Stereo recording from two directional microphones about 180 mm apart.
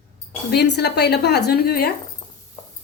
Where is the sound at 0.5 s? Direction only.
65° left (ahead or behind).